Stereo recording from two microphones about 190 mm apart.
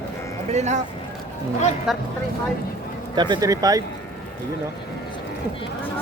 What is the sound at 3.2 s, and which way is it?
Speech, 25° right (ahead or behind).